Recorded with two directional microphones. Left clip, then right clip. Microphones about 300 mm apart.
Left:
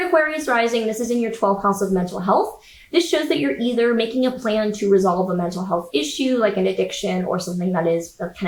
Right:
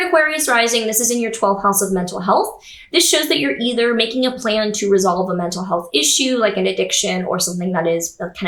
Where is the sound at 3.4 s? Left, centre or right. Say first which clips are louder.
Right 2 dB; centre.